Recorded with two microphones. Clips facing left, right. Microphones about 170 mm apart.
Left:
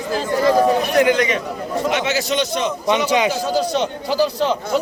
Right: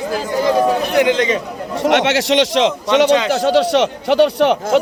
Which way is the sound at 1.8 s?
75° right (ahead or behind).